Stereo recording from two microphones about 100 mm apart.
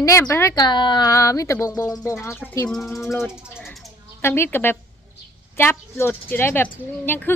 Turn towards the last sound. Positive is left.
turn(degrees=20)  # may be behind; listen again after turning